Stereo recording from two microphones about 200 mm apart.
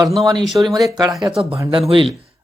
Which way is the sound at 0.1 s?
Centre (ahead or behind).